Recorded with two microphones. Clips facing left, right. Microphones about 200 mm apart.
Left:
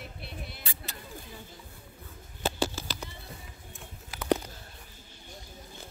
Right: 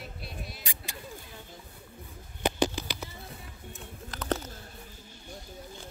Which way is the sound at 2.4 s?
15° right (ahead or behind).